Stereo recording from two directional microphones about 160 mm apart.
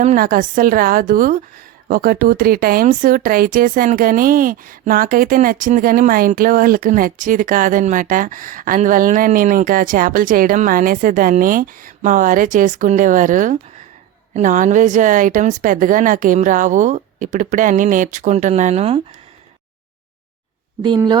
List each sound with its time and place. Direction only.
0.0 s a woman's voice: 55° right (ahead or behind); by 19.0 s 40° right (ahead or behind)
20.8 s speech: 25° right (ahead or behind)